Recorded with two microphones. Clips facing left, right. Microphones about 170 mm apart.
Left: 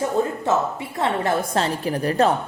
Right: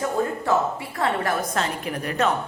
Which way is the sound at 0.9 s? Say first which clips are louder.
Left 3 dB; 25° left (ahead or behind).